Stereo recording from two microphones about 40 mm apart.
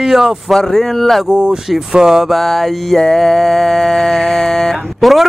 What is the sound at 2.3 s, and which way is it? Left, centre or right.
Music, centre.